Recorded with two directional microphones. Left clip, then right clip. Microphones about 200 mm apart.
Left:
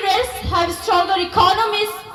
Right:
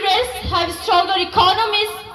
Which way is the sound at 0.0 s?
65° left (ahead or behind).